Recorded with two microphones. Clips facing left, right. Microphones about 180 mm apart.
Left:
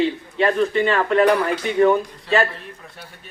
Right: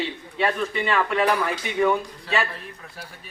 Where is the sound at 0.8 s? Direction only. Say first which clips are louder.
Left 4 dB; 40° left (ahead or behind).